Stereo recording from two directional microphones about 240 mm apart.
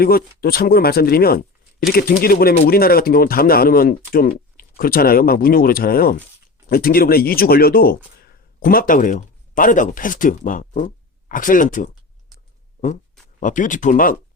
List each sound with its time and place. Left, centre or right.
0.0 s speech: left
13.4 s speech: left